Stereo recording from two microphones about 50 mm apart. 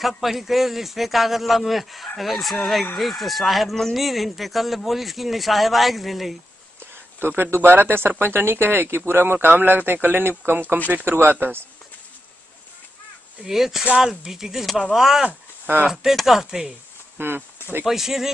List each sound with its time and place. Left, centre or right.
0.2 s speech: centre
7.2 s speech: right
13.5 s speech: centre
17.2 s speech: right
17.8 s speech: centre